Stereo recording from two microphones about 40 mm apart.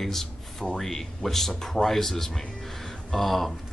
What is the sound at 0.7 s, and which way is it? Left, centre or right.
Speech, centre.